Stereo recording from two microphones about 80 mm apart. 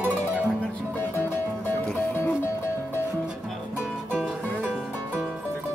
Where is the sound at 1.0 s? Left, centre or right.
Left.